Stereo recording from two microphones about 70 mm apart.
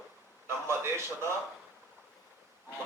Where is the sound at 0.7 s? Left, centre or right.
Right.